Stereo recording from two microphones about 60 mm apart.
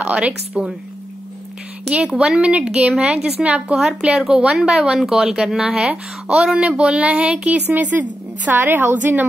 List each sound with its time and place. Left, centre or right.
0.0 s a woman's voice: right
2.1 s a woman's voice: centre
7.7 s a woman's voice: right